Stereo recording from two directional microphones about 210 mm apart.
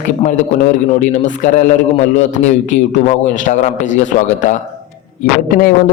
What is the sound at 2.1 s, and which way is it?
A man's voice, 35° left (ahead or behind).